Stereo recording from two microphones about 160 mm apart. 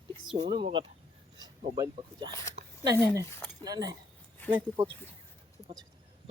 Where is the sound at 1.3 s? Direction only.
25° right (ahead or behind).